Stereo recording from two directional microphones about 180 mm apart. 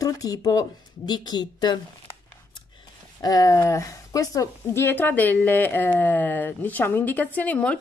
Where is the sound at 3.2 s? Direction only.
20° left (ahead or behind).